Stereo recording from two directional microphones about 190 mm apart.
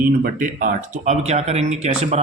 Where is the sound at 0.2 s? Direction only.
45° right (ahead or behind).